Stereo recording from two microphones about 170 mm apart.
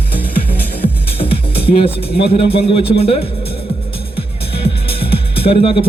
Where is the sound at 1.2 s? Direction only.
35° left (ahead or behind).